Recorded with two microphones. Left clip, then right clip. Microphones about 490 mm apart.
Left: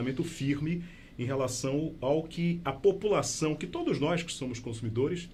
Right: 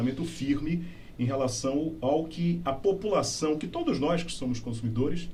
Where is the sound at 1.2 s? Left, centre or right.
Left.